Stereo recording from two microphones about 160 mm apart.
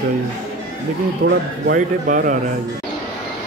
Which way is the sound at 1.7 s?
60° right (ahead or behind).